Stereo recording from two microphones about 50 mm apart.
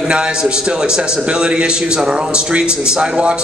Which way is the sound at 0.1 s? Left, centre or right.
Centre.